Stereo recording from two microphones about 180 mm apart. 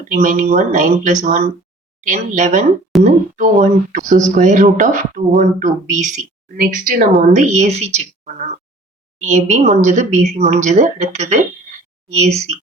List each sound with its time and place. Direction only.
0.1 s speech: 50° right (ahead or behind)